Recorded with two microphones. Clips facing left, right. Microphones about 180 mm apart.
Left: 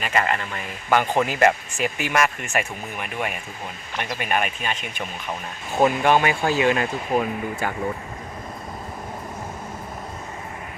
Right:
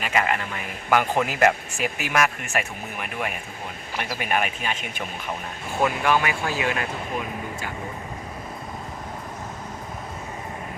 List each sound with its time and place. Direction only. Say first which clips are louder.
0.0 s speech: left 1 dB; 5° right (ahead or behind)
5.8 s speech: left 4 dB; 25° left (ahead or behind)
7.1 s speech: left 7 dB; 45° left (ahead or behind)